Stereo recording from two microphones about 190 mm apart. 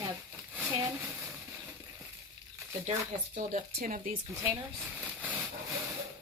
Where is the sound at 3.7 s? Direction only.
45° right (ahead or behind).